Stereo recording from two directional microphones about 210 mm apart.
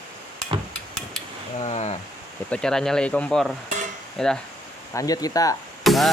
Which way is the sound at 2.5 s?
5° left (ahead or behind).